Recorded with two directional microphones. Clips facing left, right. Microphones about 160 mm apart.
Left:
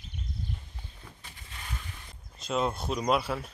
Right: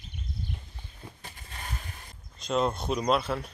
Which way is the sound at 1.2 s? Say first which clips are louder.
Right 4 dB; 45° right (ahead or behind).